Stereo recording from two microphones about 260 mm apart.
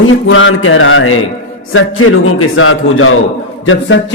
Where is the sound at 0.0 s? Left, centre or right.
Left.